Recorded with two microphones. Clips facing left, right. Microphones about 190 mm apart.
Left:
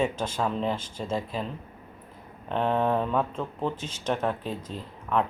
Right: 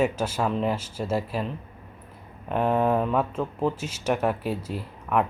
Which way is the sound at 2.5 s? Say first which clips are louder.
Right 2 dB; 5° right (ahead or behind).